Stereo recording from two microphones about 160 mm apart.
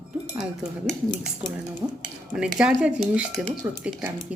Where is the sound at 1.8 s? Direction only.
15° right (ahead or behind).